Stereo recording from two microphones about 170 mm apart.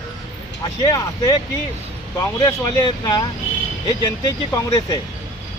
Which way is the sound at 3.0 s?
25° left (ahead or behind).